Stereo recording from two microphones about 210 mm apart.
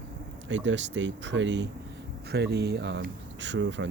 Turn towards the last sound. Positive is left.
turn(degrees=-60)  # may be behind; listen again after turning